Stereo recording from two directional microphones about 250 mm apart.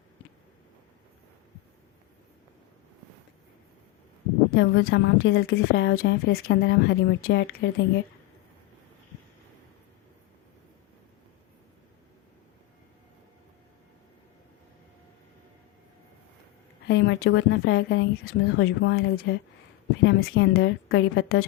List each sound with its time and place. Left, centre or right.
4.5 s a woman's voice: left
16.8 s speech: left
18.0 s a woman's voice: left
20.1 s a woman's voice: left